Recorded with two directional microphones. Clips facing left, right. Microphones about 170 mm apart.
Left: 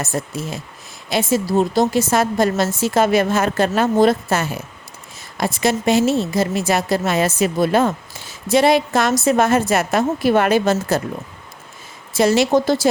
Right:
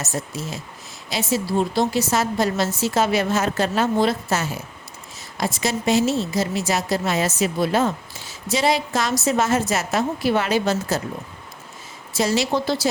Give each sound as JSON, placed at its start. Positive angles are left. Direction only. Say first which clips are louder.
{"t": 0.0, "sound": "a woman's voice", "louder": "left 4 dB", "side_deg": 55}
{"t": 12.1, "sound": "a woman's voice", "louder": "left 6 dB", "side_deg": 60}